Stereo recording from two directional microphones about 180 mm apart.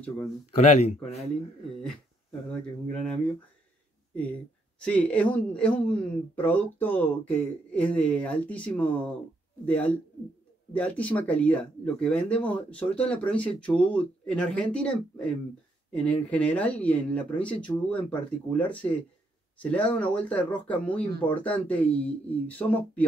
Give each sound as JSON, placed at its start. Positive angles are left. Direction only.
{"t": 0.6, "sound": "speech", "side_deg": 40}
{"t": 2.9, "sound": "speech", "side_deg": 5}